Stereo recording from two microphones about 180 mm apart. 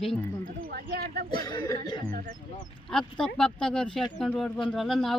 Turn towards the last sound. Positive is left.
turn(degrees=0)  # may be behind; listen again after turning